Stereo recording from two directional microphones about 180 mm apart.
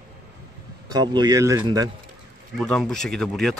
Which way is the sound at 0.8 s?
25° right (ahead or behind).